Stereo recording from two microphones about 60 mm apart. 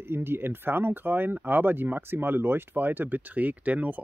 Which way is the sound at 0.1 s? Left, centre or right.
Right.